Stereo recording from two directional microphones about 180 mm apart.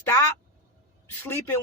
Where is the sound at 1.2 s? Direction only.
10° left (ahead or behind).